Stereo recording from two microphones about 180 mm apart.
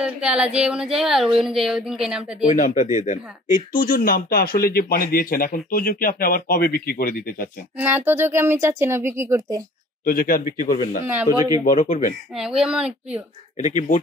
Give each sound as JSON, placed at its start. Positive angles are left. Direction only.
{"t": 0.0, "sound": "a sound", "side_deg": -5}
{"t": 0.6, "sound": "a woman's voice", "side_deg": -5}
{"t": 2.4, "sound": "speech", "side_deg": 45}
{"t": 7.7, "sound": "speech", "side_deg": -10}
{"t": 10.0, "sound": "speech", "side_deg": 55}
{"t": 11.2, "sound": "speech", "side_deg": -20}
{"t": 11.6, "sound": "speech", "side_deg": 45}
{"t": 12.4, "sound": "a woman's voice", "side_deg": -5}
{"t": 13.6, "sound": "speech", "side_deg": 45}